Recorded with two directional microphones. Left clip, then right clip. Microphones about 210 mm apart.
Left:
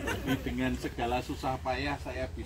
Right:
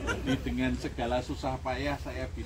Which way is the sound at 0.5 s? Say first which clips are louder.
Right 1 dB; 5° right (ahead or behind).